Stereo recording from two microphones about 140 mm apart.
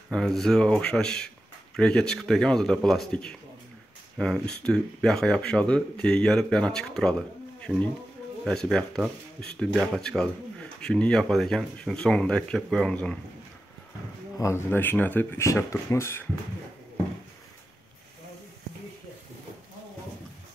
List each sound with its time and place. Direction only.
0.1 s speech: centre (ahead or behind)
14.4 s speech: 15° left (ahead or behind)